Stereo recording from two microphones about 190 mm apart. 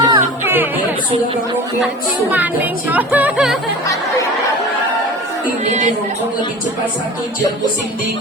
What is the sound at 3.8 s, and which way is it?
Music, 15° left (ahead or behind).